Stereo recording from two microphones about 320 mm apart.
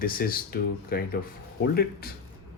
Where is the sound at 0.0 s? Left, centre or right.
Left.